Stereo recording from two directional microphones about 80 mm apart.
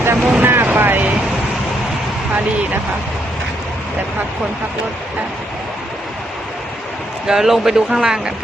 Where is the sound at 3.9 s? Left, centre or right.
Right.